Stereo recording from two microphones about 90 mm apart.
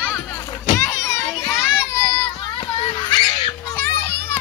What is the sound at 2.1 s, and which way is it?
Children playing, 65° left (ahead or behind).